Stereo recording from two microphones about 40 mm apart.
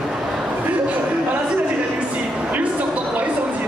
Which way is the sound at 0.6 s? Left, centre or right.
Right.